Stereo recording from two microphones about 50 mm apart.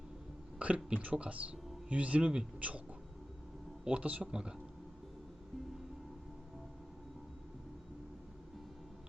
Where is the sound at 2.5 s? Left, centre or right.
Right.